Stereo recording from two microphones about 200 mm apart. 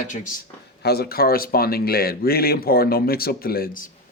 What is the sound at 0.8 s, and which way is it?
A man's voice, 50° left (ahead or behind).